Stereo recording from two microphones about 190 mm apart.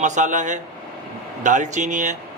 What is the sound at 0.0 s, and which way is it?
A man's voice, 40° right (ahead or behind).